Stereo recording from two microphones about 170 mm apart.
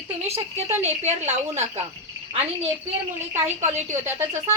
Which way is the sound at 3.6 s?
40° right (ahead or behind).